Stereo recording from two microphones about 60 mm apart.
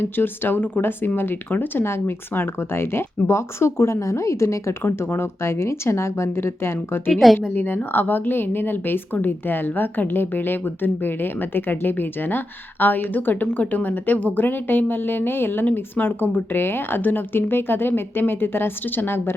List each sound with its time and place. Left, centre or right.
0.0 s speech: left
1.8 s speech: left
7.1 s speech: centre
7.5 s speech: left